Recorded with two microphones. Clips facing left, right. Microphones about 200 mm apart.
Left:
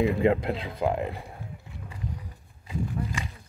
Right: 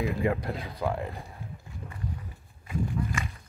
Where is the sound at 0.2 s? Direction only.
15° left (ahead or behind).